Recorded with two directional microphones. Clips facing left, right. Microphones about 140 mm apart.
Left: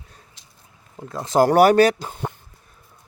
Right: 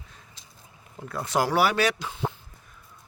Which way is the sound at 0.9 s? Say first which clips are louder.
Left 2 dB; 25° left (ahead or behind).